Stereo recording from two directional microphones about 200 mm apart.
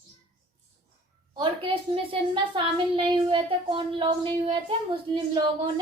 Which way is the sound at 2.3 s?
25° right (ahead or behind).